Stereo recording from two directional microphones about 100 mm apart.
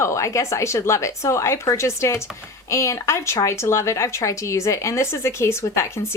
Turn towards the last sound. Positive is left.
turn(degrees=25)  # may be behind; listen again after turning